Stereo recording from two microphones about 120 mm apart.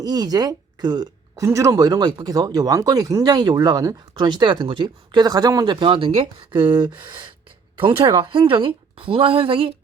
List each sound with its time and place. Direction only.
0.0 s speech: 35° right (ahead or behind)
5.7 s a woman's voice: 45° right (ahead or behind)